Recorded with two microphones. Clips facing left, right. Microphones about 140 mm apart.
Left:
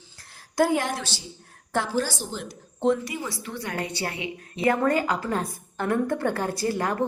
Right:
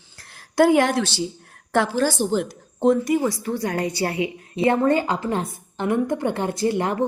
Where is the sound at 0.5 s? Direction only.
75° right (ahead or behind).